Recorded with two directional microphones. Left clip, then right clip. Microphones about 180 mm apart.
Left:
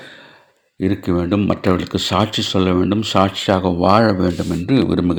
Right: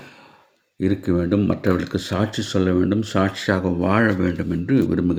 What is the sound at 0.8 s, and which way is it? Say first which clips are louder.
Speech: left 2 dB; 15° left (ahead or behind).